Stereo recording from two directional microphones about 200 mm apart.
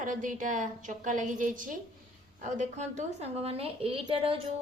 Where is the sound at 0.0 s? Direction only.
40° right (ahead or behind).